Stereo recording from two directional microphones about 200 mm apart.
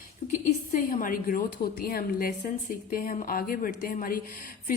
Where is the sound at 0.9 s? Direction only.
45° left (ahead or behind).